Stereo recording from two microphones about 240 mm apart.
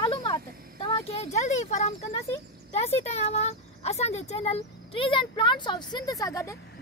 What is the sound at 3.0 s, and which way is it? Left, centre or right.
A child's voice, left.